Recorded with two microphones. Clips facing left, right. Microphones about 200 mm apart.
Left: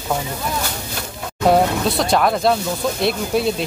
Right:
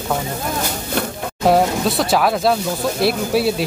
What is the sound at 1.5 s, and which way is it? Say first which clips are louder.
Speech: even; centre (ahead or behind).